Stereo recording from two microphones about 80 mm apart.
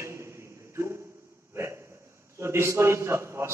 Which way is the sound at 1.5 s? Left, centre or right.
Right.